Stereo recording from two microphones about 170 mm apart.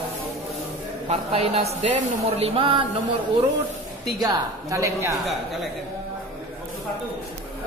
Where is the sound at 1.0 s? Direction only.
35° right (ahead or behind).